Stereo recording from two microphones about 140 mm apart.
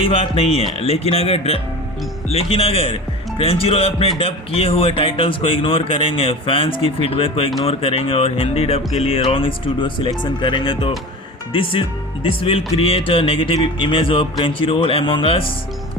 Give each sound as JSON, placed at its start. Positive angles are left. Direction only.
{"t": 0.0, "sound": "speech", "side_deg": 40}